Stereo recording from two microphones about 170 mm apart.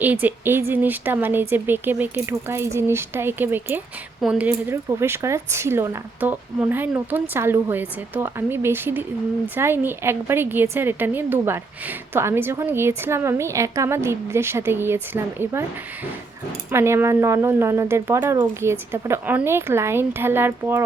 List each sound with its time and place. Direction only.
0.0 s a woman's voice: 10° right (ahead or behind)
16.7 s a woman's voice: 15° right (ahead or behind)